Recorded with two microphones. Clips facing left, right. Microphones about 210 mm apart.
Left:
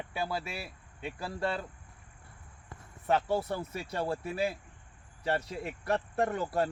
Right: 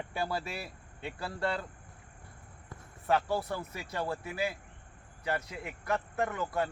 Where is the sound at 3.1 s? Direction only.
25° left (ahead or behind).